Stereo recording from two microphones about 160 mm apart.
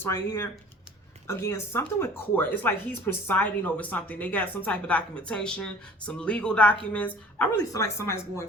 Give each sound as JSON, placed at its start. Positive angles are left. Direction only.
{"t": 0.0, "sound": "speech", "side_deg": 15}
{"t": 7.6, "sound": "speech", "side_deg": 20}